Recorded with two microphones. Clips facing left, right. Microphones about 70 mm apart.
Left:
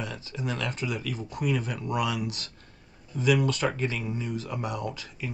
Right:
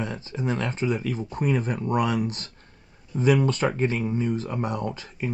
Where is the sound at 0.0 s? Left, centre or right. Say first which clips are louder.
Right 5 dB; right.